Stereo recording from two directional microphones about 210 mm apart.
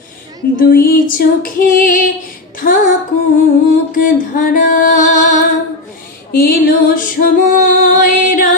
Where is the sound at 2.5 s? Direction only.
40° left (ahead or behind).